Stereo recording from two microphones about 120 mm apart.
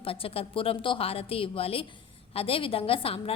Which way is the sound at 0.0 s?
50° left (ahead or behind).